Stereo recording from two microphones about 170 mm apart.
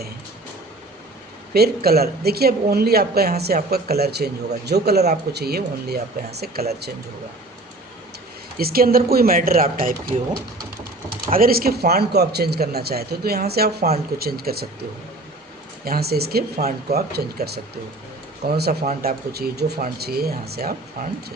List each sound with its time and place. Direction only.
1.5 s a woman's voice: 65° right (ahead or behind)
8.5 s speech: 60° right (ahead or behind)
10.1 s speech: 30° right (ahead or behind)
11.3 s a woman's voice: 60° right (ahead or behind)
15.8 s a woman's voice: 65° right (ahead or behind)